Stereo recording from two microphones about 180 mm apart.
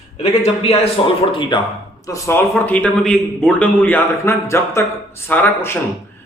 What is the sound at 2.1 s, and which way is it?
A man's voice, 15° left (ahead or behind).